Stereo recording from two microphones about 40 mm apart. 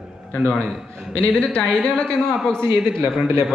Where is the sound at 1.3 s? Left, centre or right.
Centre.